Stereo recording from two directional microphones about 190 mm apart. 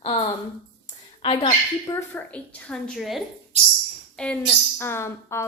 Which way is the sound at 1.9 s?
15° left (ahead or behind).